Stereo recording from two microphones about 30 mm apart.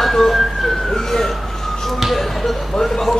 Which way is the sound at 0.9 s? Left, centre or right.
Centre.